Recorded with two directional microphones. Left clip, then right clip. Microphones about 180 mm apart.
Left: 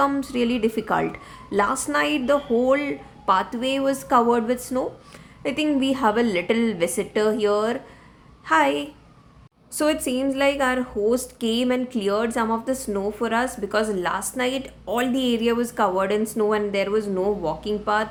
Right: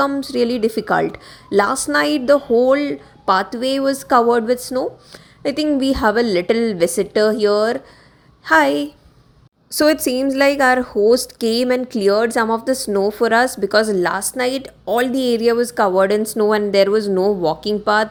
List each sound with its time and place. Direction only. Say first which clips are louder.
0.1 s a woman's voice: right 5 dB; 25° right (ahead or behind)